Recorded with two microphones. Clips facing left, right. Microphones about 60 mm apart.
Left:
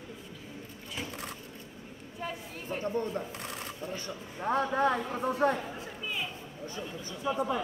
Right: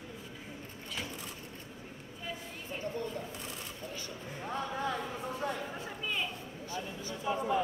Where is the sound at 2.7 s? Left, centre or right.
Left.